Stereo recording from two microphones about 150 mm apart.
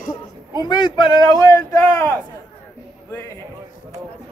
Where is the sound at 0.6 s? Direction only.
30° left (ahead or behind).